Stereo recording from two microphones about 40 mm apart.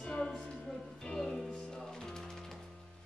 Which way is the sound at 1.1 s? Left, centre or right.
Centre.